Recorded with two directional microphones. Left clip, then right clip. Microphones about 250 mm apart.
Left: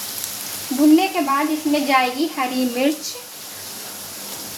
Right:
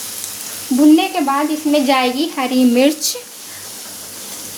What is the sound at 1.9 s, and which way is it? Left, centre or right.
A woman's voice, right.